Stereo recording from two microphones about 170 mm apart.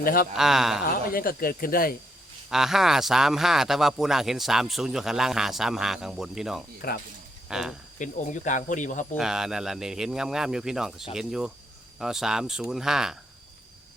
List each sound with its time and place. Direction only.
0.0 s speech: 60° left (ahead or behind)
0.3 s speech: 5° right (ahead or behind)
0.9 s speech: 60° left (ahead or behind)
2.5 s speech: centre (ahead or behind)
6.8 s speech: 60° left (ahead or behind)
7.4 s speech: centre (ahead or behind)
7.9 s speech: 50° left (ahead or behind)
9.1 s speech: 5° right (ahead or behind)